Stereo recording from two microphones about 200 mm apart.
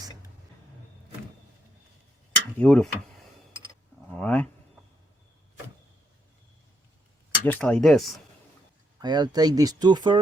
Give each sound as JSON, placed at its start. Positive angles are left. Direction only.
{"t": 2.6, "sound": "speech", "side_deg": 5}
{"t": 4.1, "sound": "a sound", "side_deg": 5}
{"t": 7.4, "sound": "speech", "side_deg": 5}
{"t": 9.0, "sound": "speech", "side_deg": -20}